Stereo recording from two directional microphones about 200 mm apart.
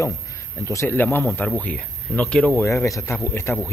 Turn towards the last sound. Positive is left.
turn(degrees=10)  # may be behind; listen again after turning